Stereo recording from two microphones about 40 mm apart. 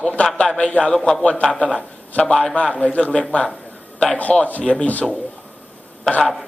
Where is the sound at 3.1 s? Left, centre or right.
Left.